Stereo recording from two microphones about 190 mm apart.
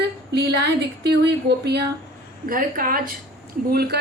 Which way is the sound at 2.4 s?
50° right (ahead or behind).